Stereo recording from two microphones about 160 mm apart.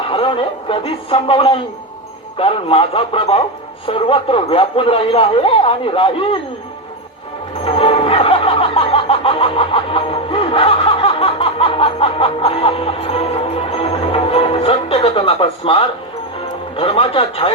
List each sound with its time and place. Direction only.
0.0 s a man's voice: 35° left (ahead or behind)
7.6 s music: 35° left (ahead or behind)
16.7 s speech: 35° left (ahead or behind)